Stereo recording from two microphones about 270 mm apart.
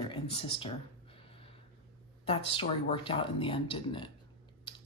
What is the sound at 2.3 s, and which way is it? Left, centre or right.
Speech, centre.